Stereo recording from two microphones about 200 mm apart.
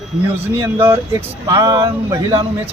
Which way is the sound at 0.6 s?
10° right (ahead or behind).